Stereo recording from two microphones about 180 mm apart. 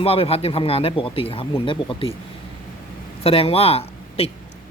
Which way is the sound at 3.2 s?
35° left (ahead or behind).